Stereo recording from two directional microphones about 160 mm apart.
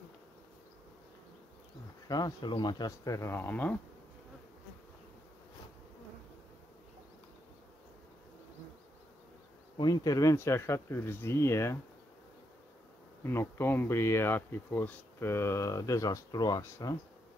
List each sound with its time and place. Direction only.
2.0 s speech: 25° left (ahead or behind)
9.8 s speech: 25° left (ahead or behind)
13.2 s speech: 15° left (ahead or behind)